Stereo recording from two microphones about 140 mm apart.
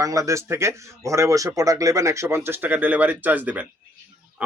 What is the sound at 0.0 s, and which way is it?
Speech, 25° right (ahead or behind).